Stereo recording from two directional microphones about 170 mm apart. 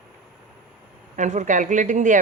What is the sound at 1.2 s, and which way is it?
Speech, 45° right (ahead or behind).